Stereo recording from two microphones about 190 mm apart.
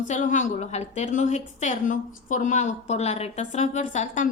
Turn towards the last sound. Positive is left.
turn(degrees=40)  # may be behind; listen again after turning